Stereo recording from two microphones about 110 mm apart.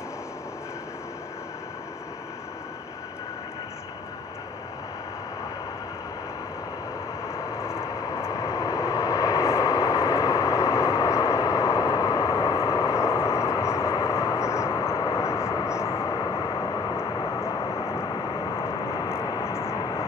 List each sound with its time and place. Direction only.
7.3 s vehicle: 25° left (ahead or behind)
16.1 s vehicle: 40° left (ahead or behind)
17.7 s vehicle: 25° left (ahead or behind)
18.1 s vehicle: 45° left (ahead or behind)
19.4 s vehicle: 25° left (ahead or behind)